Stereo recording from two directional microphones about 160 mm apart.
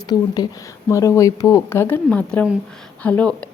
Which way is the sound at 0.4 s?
25° left (ahead or behind).